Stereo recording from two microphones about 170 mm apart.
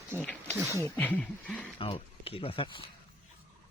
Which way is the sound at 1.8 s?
35° left (ahead or behind).